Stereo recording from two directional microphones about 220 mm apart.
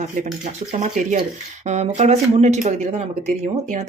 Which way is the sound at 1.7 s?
30° right (ahead or behind).